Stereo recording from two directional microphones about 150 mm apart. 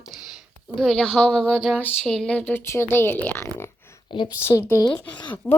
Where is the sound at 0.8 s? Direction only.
5° left (ahead or behind).